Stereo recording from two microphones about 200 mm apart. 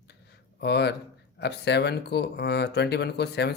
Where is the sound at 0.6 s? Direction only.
55° left (ahead or behind).